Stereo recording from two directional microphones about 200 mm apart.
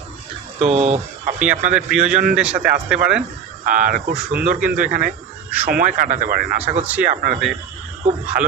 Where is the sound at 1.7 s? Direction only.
5° right (ahead or behind).